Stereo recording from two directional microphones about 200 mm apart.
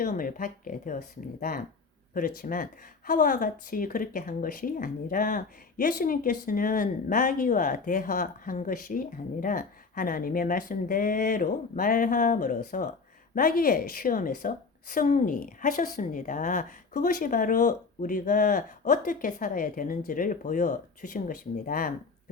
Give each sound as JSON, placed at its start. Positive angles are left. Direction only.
{"t": 0.0, "sound": "speech", "side_deg": 45}